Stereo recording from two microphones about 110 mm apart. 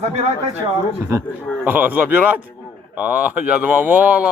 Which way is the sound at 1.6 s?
15° right (ahead or behind).